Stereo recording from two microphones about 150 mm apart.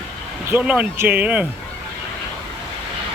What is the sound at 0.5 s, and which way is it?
Speech, 5° right (ahead or behind).